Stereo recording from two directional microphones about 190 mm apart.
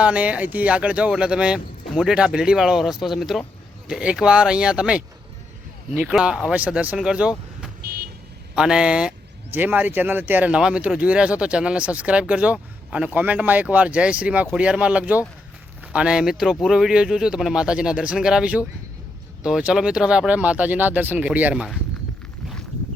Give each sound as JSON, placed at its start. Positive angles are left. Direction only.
{"t": 0.0, "sound": "speech", "side_deg": -5}
{"t": 7.8, "sound": "vehicle", "side_deg": -50}
{"t": 8.5, "sound": "speech", "side_deg": -5}